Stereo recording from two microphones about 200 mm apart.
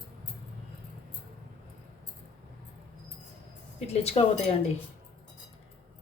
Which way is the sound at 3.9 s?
30° left (ahead or behind).